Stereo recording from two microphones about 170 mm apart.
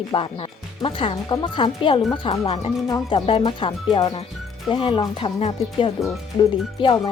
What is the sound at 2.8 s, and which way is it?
Speech, 25° left (ahead or behind).